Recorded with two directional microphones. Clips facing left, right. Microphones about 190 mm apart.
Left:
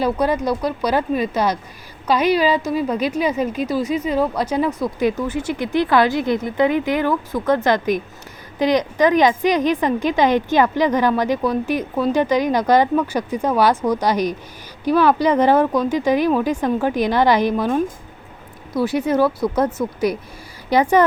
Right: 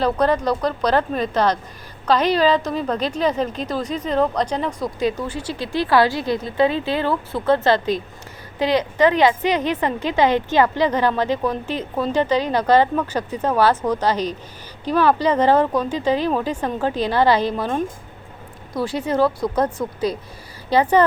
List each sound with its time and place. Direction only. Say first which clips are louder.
0.0 s a woman's voice: even; 10° left (ahead or behind)
5.5 s a woman's voice: even; 20° left (ahead or behind)
18.9 s a woman's voice: left 1 dB; 10° left (ahead or behind)